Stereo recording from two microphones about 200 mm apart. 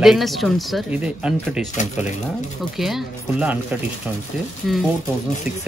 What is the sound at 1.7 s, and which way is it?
Speech, 35° left (ahead or behind).